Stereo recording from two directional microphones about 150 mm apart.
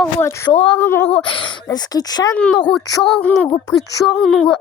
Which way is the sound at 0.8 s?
15° left (ahead or behind).